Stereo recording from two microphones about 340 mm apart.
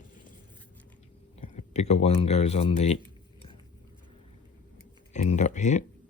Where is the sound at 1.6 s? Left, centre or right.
Centre.